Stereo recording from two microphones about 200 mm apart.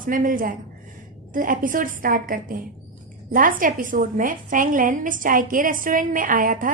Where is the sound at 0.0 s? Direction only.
40° right (ahead or behind).